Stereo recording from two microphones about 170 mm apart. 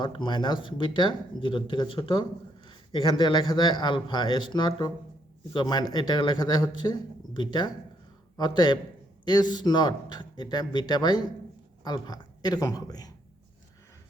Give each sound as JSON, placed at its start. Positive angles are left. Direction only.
{"t": 0.0, "sound": "speech", "side_deg": 30}